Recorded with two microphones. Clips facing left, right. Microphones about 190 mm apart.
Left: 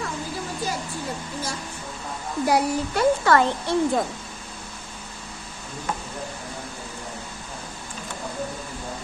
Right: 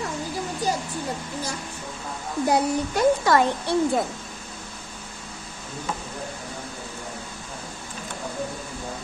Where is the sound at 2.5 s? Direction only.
20° right (ahead or behind).